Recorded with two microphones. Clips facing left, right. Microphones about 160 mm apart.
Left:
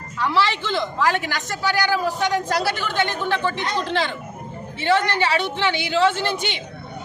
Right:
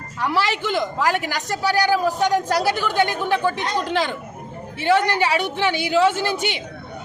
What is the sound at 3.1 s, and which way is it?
A man's voice, 10° right (ahead or behind).